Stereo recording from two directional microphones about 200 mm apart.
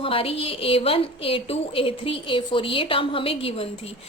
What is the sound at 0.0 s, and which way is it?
A woman's voice, 25° left (ahead or behind).